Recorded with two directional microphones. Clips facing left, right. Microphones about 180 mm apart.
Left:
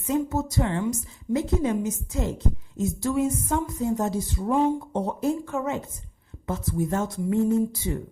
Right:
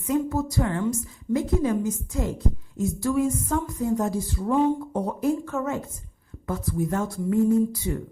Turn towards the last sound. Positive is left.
turn(degrees=25)  # may be behind; listen again after turning